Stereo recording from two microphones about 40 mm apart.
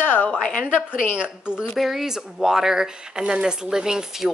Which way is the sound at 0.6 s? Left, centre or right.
Right.